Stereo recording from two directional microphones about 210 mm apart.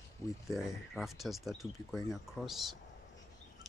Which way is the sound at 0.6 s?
Centre (ahead or behind).